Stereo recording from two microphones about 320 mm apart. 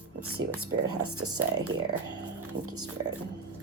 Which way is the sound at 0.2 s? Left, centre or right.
Right.